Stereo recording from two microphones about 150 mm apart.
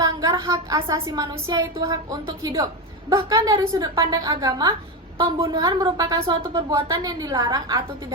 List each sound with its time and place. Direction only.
0.0 s a woman's voice: 25° right (ahead or behind)